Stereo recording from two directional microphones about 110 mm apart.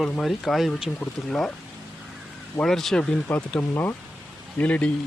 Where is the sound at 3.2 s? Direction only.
20° left (ahead or behind).